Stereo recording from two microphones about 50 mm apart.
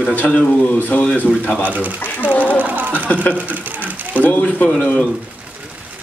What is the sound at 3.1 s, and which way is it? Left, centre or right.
Speech, left.